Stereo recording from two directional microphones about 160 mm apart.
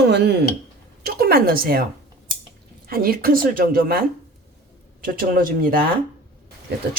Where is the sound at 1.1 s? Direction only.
70° right (ahead or behind).